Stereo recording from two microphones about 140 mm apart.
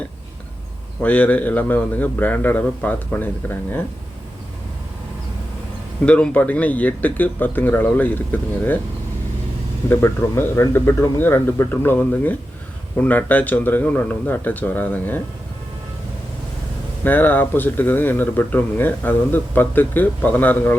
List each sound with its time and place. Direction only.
1.0 s speech: 10° left (ahead or behind)
6.1 s speech: 10° left (ahead or behind)
9.9 s speech: 15° left (ahead or behind)
17.0 s speech: 15° left (ahead or behind)